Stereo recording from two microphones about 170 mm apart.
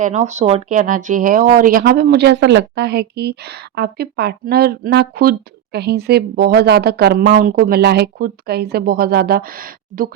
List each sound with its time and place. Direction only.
0.0 s speech: 45° right (ahead or behind)